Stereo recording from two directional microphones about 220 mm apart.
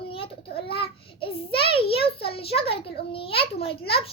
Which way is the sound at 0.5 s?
25° left (ahead or behind).